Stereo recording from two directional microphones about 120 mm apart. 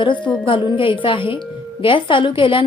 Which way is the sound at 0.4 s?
45° left (ahead or behind).